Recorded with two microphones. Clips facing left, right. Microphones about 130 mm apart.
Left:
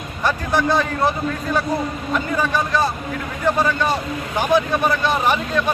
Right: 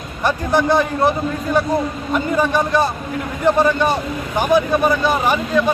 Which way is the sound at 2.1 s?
20° right (ahead or behind).